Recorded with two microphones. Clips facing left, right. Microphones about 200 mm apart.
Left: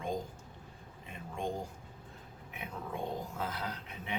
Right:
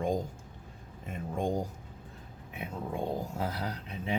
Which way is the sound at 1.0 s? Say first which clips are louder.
Right 6 dB; 40° right (ahead or behind).